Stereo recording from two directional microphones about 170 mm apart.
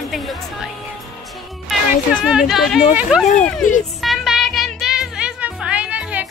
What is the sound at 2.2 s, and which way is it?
Music, 5° right (ahead or behind).